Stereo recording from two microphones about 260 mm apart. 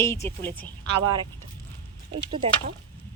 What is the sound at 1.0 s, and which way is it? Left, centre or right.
Speech, centre.